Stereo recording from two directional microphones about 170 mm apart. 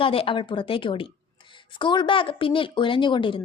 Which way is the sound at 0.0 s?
30° left (ahead or behind).